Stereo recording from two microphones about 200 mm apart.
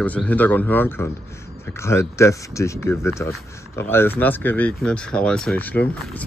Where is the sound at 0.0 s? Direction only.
5° left (ahead or behind).